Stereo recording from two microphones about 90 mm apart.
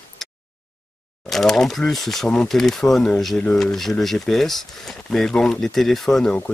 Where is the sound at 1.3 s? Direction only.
5° left (ahead or behind).